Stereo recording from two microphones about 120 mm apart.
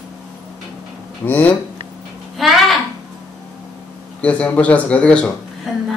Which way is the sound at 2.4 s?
Centre (ahead or behind).